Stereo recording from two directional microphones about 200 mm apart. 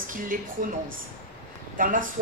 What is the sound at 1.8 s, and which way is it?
Speech, 40° right (ahead or behind).